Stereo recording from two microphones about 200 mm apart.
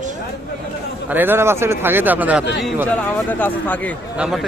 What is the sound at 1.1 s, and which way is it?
A man's voice, 10° right (ahead or behind).